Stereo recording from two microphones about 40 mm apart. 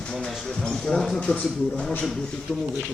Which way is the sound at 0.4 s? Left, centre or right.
Centre.